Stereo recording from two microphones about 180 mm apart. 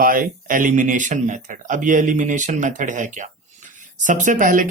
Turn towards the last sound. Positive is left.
turn(degrees=-45)  # may be behind; listen again after turning